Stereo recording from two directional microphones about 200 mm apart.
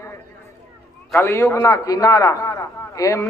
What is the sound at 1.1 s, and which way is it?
A man's voice, 10° left (ahead or behind).